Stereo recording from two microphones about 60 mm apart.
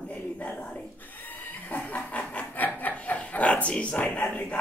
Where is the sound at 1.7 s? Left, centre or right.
Left.